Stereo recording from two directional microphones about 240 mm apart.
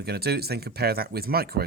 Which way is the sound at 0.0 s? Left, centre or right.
Right.